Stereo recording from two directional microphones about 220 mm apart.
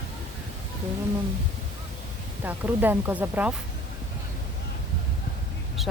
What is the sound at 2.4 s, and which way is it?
Speech, 10° right (ahead or behind).